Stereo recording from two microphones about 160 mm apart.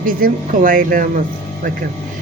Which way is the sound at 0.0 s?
60° right (ahead or behind).